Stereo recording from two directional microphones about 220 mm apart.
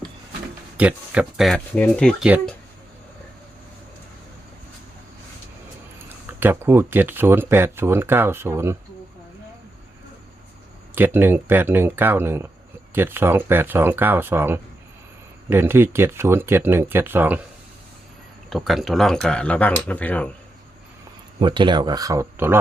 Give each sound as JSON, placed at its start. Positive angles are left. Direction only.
{"t": 0.8, "sound": "speech", "side_deg": -5}
{"t": 6.2, "sound": "speech", "side_deg": -10}
{"t": 10.9, "sound": "speech", "side_deg": -10}
{"t": 18.5, "sound": "speech", "side_deg": 0}
{"t": 21.3, "sound": "speech", "side_deg": -20}